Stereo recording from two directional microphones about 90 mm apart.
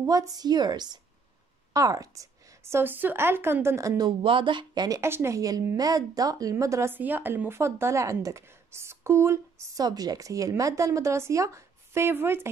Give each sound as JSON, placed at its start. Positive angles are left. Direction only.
{"t": 0.0, "sound": "a woman's voice", "side_deg": -40}
{"t": 2.6, "sound": "a woman's voice", "side_deg": -25}
{"t": 4.2, "sound": "speech", "side_deg": -75}
{"t": 4.8, "sound": "speech", "side_deg": -40}
{"t": 6.5, "sound": "speech", "side_deg": -30}
{"t": 7.0, "sound": "speech", "side_deg": -20}
{"t": 9.8, "sound": "a woman's voice", "side_deg": -45}